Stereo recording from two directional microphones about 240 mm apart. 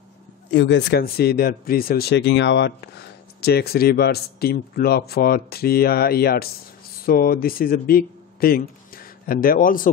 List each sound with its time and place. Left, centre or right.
0.5 s speech: left